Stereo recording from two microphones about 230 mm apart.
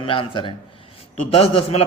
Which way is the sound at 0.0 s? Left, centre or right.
Left.